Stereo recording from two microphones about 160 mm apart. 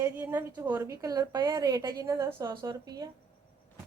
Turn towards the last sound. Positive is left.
turn(degrees=-25)  # may be behind; listen again after turning